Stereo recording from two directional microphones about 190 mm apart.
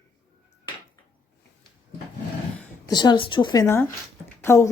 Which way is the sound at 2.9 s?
20° left (ahead or behind).